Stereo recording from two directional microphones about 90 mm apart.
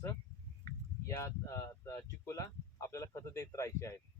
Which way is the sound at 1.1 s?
30° left (ahead or behind).